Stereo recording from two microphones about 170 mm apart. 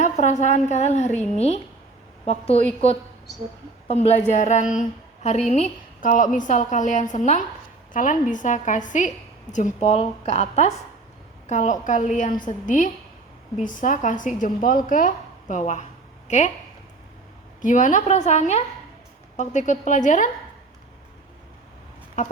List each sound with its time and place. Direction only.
0.0 s speech: 45° left (ahead or behind)
2.2 s a woman's voice: 35° left (ahead or behind)
3.8 s a woman's voice: 40° left (ahead or behind)
17.6 s speech: 50° left (ahead or behind)